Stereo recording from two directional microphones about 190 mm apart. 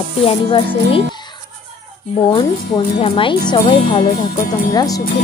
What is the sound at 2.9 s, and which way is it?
Speech, 30° left (ahead or behind).